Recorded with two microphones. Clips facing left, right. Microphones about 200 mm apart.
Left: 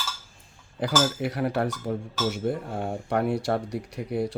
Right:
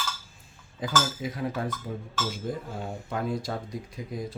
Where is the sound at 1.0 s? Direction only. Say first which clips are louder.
Left 5 dB; 70° left (ahead or behind).